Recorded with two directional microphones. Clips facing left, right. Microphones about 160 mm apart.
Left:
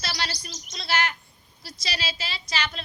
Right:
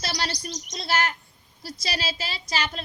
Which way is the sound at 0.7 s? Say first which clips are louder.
Right 1 dB; 40° right (ahead or behind).